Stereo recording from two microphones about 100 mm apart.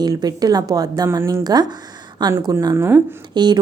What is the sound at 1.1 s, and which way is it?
Speech, 30° right (ahead or behind).